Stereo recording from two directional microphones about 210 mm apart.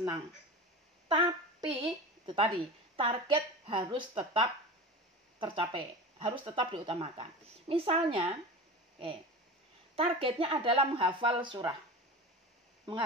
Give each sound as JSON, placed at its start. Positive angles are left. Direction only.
{"t": 1.0, "sound": "a woman's voice", "side_deg": -25}
{"t": 9.9, "sound": "a woman's voice", "side_deg": -25}